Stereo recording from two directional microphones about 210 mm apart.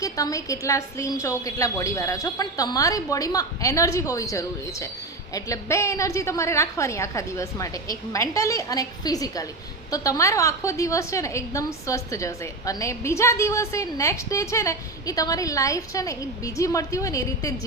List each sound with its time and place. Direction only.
0.0 s a woman's voice: 15° left (ahead or behind)